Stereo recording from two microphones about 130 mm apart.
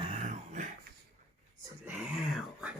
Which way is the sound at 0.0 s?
55° right (ahead or behind).